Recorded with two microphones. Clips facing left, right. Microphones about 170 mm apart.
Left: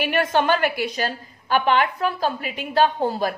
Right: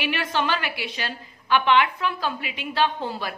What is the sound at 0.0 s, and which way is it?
A woman's voice, 50° left (ahead or behind).